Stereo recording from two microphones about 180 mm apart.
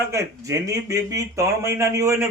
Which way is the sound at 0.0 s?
15° right (ahead or behind).